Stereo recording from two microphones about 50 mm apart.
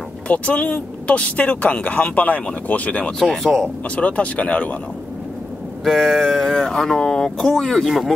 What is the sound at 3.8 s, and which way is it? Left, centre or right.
Speech, left.